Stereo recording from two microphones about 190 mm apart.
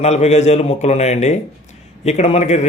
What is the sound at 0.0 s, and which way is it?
A man's voice, 35° left (ahead or behind).